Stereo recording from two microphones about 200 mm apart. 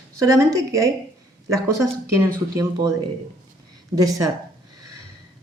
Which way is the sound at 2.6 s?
15° right (ahead or behind).